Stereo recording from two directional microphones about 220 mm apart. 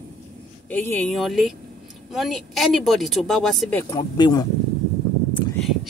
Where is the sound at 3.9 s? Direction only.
15° left (ahead or behind).